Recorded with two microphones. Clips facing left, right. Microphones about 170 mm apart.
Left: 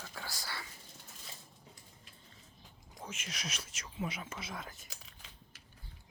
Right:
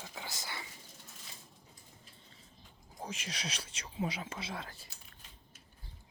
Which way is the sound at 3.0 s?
35° right (ahead or behind).